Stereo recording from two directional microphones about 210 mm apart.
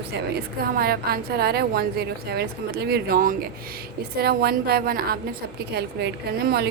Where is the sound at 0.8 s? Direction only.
45° right (ahead or behind).